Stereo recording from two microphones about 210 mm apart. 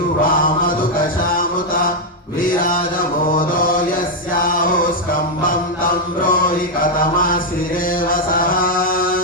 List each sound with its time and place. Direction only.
5.5 s music: 40° left (ahead or behind)
7.2 s mantra: 40° left (ahead or behind)